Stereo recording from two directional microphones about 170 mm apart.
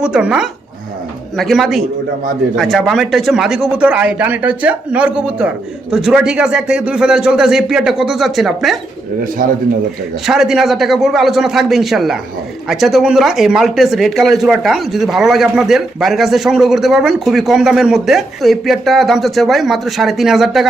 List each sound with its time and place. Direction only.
0.0 s speech: 5° right (ahead or behind)
10.2 s speech: centre (ahead or behind)